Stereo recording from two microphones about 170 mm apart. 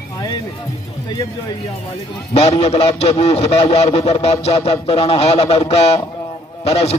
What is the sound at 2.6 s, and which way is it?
A man's voice, 35° left (ahead or behind).